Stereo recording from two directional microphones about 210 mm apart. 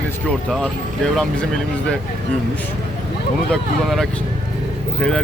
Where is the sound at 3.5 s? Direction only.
Centre (ahead or behind).